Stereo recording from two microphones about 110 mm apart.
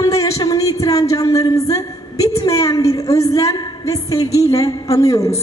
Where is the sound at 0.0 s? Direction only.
30° left (ahead or behind).